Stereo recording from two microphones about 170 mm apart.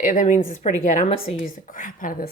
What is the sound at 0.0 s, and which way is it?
Speech, 50° left (ahead or behind).